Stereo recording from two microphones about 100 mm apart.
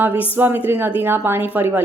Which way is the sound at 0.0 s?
20° right (ahead or behind).